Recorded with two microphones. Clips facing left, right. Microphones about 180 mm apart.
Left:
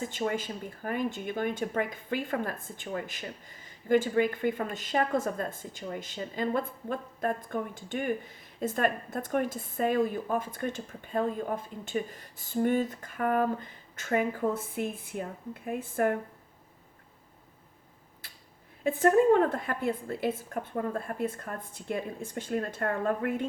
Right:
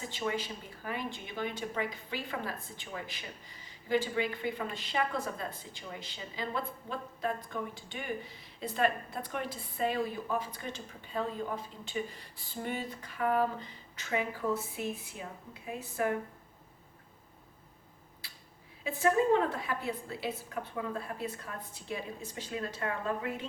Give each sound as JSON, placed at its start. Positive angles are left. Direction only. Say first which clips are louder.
{"t": 0.0, "sound": "speech", "louder": "left 4 dB", "side_deg": 50}
{"t": 18.2, "sound": "a sound", "louder": "left 1 dB", "side_deg": 50}
{"t": 18.8, "sound": "speech", "louder": "left 5 dB", "side_deg": 50}